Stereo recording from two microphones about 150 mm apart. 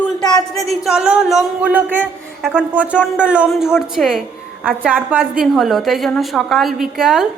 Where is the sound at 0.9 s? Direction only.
5° right (ahead or behind).